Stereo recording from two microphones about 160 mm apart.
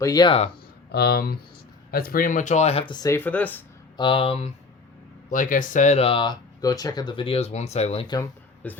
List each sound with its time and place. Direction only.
0.0 s speech: 25° left (ahead or behind)
0.9 s speech: 85° left; by 3.2 s 25° left (ahead or behind)
3.2 s speech: 10° left (ahead or behind)
3.9 s speech: 30° left (ahead or behind)
5.3 s speech: 55° left (ahead or behind)
8.0 s speech: 25° left (ahead or behind)
8.6 s speech: 10° left (ahead or behind)